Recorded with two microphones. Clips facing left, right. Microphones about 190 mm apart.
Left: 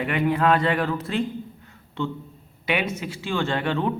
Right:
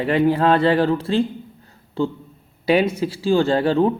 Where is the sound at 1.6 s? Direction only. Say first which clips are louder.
Right 8 dB; 35° right (ahead or behind).